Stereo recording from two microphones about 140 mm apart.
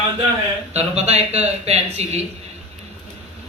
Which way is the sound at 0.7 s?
50° right (ahead or behind).